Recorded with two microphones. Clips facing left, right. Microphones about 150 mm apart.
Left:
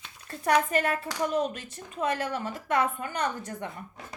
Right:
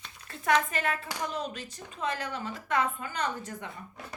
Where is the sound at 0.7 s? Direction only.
45° left (ahead or behind).